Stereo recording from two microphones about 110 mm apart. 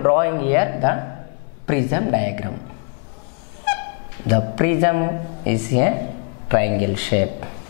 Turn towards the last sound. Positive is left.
turn(degrees=10)  # may be behind; listen again after turning